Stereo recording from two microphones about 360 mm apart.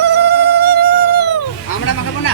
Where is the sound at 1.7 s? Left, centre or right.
Left.